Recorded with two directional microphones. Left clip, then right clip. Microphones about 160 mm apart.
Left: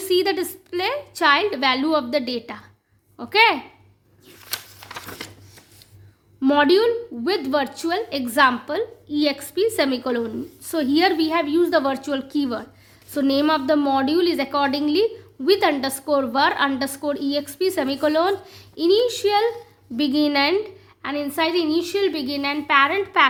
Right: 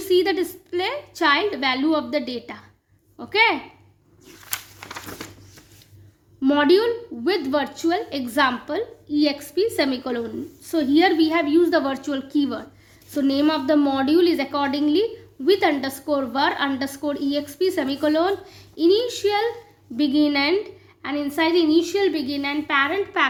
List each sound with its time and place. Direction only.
0.0 s a woman's voice: 20° left (ahead or behind)
6.4 s a woman's voice: 20° left (ahead or behind)